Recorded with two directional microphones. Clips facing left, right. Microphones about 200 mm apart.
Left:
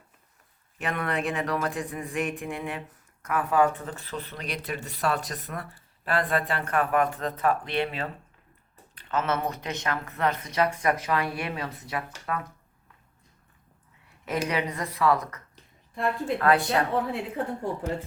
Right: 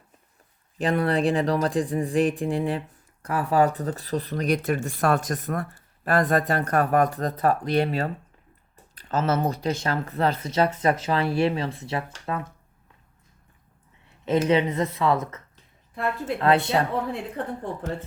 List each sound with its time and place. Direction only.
0.8 s speech: 35° right (ahead or behind)
14.3 s speech: 25° right (ahead or behind)
16.0 s a woman's voice: centre (ahead or behind)
16.4 s speech: 25° right (ahead or behind)
16.6 s a woman's voice: centre (ahead or behind)